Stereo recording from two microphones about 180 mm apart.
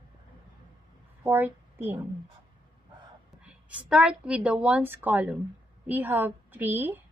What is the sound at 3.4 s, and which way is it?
A woman's voice, 5° right (ahead or behind).